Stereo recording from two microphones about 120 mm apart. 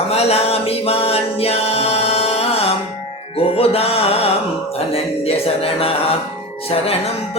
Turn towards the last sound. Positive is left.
turn(degrees=55)  # may be behind; listen again after turning